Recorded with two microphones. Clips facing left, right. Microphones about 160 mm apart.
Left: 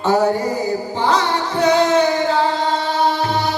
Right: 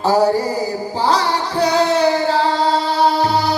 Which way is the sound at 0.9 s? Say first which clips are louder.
Right 2 dB; 35° right (ahead or behind).